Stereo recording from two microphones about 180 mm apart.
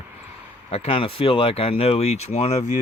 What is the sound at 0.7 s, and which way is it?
Speech, 30° left (ahead or behind).